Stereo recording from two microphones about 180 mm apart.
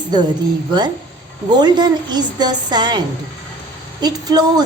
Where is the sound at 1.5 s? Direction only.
25° right (ahead or behind).